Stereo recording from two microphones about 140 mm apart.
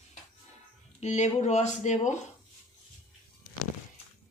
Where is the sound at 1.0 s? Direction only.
55° left (ahead or behind).